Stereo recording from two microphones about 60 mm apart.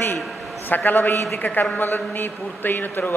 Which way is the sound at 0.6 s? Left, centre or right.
Left.